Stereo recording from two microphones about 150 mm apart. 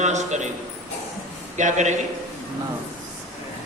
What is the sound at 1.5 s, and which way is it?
Speech, 55° right (ahead or behind).